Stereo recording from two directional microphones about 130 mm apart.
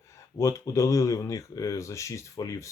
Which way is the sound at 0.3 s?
20° left (ahead or behind).